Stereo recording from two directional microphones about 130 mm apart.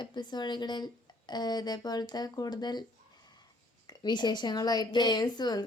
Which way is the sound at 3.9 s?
35° left (ahead or behind).